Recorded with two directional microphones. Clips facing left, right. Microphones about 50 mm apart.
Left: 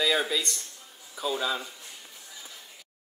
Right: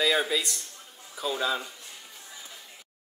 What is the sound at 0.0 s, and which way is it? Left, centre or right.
A man's voice, centre.